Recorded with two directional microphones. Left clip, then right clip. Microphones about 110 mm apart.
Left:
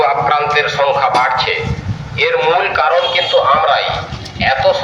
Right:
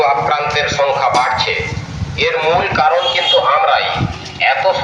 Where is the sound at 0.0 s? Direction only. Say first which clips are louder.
Left 1 dB; 5° right (ahead or behind).